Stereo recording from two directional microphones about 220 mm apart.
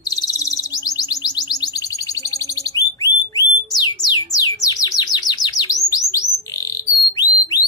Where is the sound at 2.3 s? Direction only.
15° left (ahead or behind).